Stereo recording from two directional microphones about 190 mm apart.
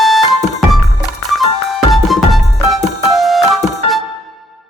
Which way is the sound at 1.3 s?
Centre (ahead or behind).